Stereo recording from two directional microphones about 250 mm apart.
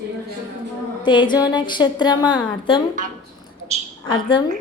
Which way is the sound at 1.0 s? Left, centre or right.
Centre.